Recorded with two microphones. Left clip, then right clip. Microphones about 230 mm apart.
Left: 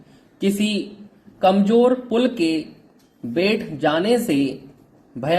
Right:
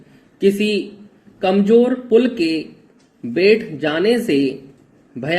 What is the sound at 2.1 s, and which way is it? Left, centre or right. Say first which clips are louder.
Speech: right 5 dB; centre.